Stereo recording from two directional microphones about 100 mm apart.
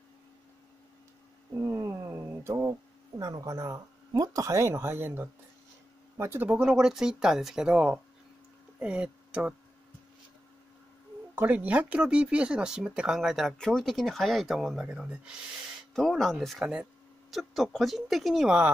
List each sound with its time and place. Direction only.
1.6 s a sound: 30° right (ahead or behind)
3.2 s speech: 35° right (ahead or behind)
6.6 s speech: 5° right (ahead or behind)
11.3 s speech: 15° right (ahead or behind)
15.9 s speech: 5° left (ahead or behind)